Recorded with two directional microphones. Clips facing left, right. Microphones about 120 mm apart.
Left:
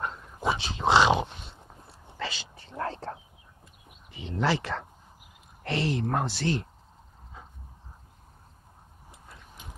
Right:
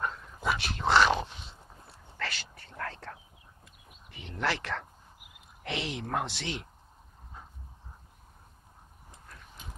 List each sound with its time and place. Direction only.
0.4 s dog: 25° left (ahead or behind)
2.1 s a sound: 15° left (ahead or behind)
4.4 s speech: 10° left (ahead or behind)